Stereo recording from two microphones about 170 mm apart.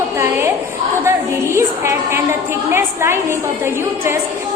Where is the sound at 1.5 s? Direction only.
15° right (ahead or behind).